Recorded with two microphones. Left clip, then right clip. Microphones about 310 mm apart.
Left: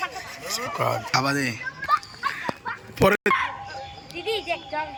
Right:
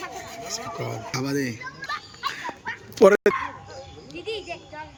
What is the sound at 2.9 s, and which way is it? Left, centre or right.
Bow-wow, centre.